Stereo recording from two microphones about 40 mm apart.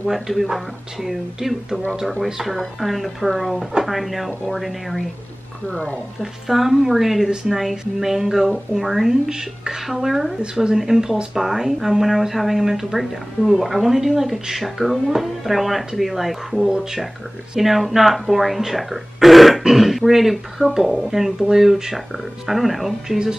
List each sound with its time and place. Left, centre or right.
0.1 s speech: centre
2.5 s speech: centre
5.7 s speech: left
6.4 s speech: centre
9.1 s speech: centre